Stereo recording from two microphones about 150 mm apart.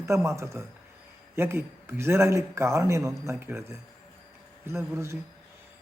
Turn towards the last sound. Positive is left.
turn(degrees=-20)  # may be behind; listen again after turning